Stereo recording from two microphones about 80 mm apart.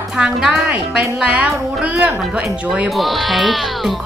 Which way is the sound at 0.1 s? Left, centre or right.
Centre.